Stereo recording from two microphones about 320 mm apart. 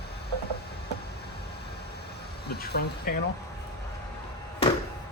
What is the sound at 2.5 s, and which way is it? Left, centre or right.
Speech, left.